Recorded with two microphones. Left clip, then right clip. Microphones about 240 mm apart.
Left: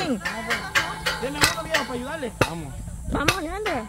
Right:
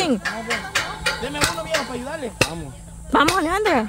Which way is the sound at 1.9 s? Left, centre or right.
Right.